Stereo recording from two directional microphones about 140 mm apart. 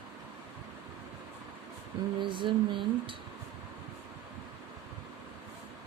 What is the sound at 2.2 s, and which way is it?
Speech, 35° right (ahead or behind).